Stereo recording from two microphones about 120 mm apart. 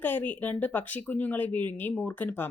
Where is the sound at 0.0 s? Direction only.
15° left (ahead or behind).